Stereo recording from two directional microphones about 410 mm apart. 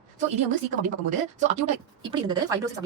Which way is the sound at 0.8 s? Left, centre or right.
Centre.